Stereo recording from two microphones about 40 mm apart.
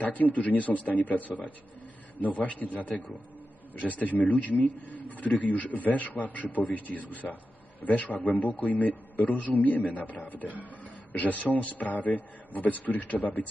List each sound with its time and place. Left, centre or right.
0.0 s a man's voice: left